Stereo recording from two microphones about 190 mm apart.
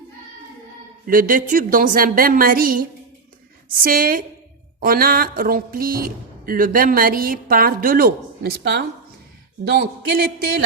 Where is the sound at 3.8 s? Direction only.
50° right (ahead or behind).